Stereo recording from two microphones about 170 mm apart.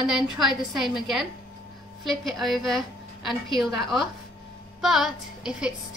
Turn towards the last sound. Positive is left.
turn(degrees=-5)  # may be behind; listen again after turning